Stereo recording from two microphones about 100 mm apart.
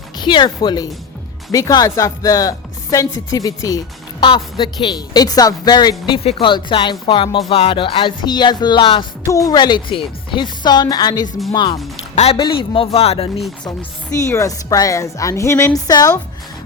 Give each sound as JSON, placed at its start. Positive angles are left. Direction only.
{"t": 0.2, "sound": "speech", "side_deg": 50}
{"t": 1.5, "sound": "a woman's voice", "side_deg": 35}
{"t": 4.2, "sound": "speech", "side_deg": 55}
{"t": 6.1, "sound": "speech", "side_deg": 65}
{"t": 9.2, "sound": "speech", "side_deg": 35}
{"t": 12.4, "sound": "speech", "side_deg": 60}
{"t": 14.2, "sound": "a woman's voice", "side_deg": 30}